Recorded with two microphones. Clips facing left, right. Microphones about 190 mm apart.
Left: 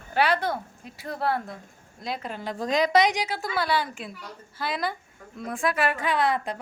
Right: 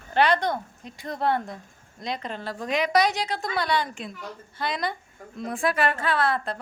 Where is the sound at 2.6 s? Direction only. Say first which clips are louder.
Left 3 dB; 35° left (ahead or behind).